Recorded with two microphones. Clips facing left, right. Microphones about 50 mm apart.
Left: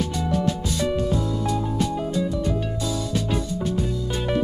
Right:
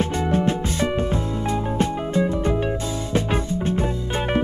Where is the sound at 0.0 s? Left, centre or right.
Right.